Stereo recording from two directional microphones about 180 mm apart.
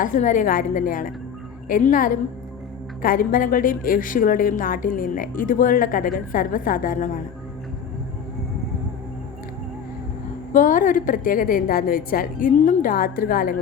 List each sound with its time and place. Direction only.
0.0 s a woman's voice: 45° left (ahead or behind)
10.5 s a woman's voice: 45° left (ahead or behind)